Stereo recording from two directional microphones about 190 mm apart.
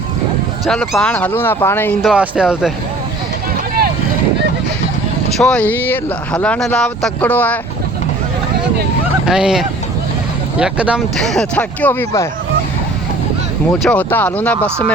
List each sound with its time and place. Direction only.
0.6 s speech: centre (ahead or behind)
2.0 s speech: 5° right (ahead or behind)
5.4 s speech: 5° left (ahead or behind)
9.2 s speech: 5° right (ahead or behind); by 12.3 s 15° left (ahead or behind)
13.8 s speech: 10° left (ahead or behind)